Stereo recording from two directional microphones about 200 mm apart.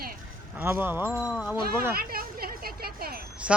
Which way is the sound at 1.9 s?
50° right (ahead or behind).